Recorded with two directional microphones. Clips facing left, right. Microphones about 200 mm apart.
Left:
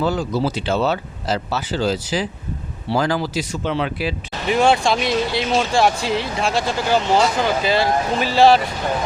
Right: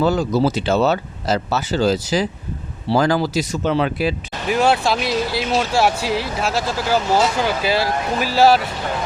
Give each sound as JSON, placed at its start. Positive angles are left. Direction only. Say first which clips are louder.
{"t": 0.0, "sound": "speech", "louder": "right 3 dB", "side_deg": -40}
{"t": 4.4, "sound": "speech", "louder": "left 1 dB", "side_deg": -5}